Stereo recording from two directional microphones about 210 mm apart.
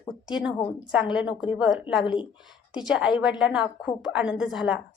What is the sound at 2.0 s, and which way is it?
Speech, 20° left (ahead or behind).